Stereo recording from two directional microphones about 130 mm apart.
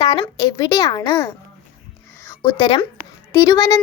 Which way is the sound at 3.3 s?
25° left (ahead or behind).